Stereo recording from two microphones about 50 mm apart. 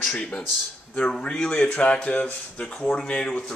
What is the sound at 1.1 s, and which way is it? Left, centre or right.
Speech, centre.